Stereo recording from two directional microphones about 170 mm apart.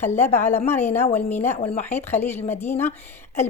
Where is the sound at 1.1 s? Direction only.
15° left (ahead or behind).